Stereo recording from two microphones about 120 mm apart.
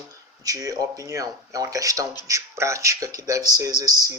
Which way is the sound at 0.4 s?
30° right (ahead or behind).